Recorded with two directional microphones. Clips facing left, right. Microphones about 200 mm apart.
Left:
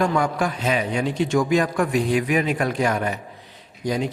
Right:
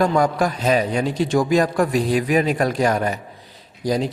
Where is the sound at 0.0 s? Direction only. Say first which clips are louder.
Right 3 dB; 40° right (ahead or behind).